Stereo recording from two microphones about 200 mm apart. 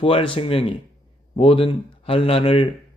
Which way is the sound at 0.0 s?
25° left (ahead or behind).